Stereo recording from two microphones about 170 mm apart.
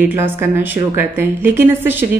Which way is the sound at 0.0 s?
10° right (ahead or behind).